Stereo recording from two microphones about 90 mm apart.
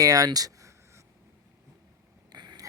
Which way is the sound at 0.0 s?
45° right (ahead or behind).